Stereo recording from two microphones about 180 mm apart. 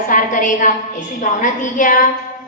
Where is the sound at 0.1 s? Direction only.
45° left (ahead or behind).